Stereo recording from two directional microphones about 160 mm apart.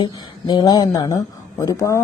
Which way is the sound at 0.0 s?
25° left (ahead or behind).